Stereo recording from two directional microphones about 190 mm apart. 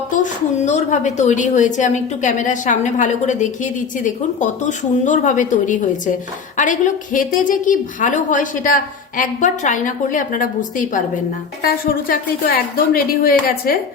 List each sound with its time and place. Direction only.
0.1 s a woman's voice: 40° left (ahead or behind)